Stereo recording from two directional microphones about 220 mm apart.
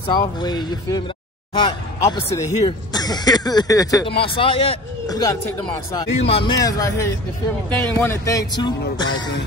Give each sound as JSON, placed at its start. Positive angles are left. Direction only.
{"t": 0.0, "sound": "speech", "side_deg": 20}
{"t": 6.1, "sound": "speech", "side_deg": 25}